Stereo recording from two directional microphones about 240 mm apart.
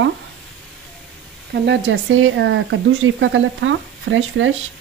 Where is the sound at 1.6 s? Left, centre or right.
Right.